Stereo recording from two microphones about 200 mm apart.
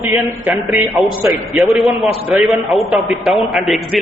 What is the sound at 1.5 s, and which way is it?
A man's voice, centre (ahead or behind).